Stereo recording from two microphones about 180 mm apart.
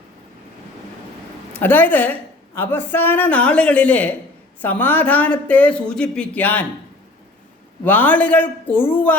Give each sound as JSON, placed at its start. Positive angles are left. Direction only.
{"t": 1.5, "sound": "speech", "side_deg": 10}
{"t": 7.9, "sound": "speech", "side_deg": 10}